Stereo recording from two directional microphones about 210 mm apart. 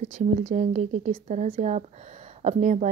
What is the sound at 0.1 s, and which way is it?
A woman's voice, 35° right (ahead or behind).